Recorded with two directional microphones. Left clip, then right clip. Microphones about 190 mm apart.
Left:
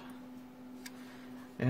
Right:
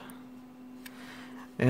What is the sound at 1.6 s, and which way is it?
Speech, 55° right (ahead or behind).